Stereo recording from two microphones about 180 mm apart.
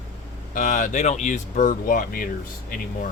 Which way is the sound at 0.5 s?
45° left (ahead or behind).